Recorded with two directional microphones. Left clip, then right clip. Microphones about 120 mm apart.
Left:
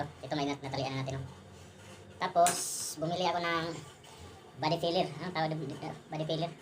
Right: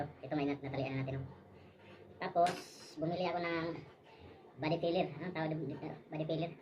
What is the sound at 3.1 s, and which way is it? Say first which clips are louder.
A woman's voice: left 5 dB; 5° right (ahead or behind).